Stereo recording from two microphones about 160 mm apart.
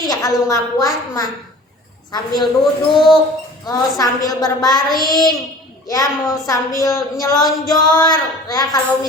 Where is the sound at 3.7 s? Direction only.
20° left (ahead or behind).